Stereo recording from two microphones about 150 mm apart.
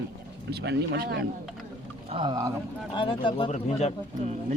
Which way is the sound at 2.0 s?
35° right (ahead or behind).